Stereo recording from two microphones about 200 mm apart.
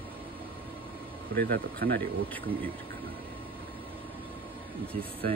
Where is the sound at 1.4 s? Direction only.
50° right (ahead or behind).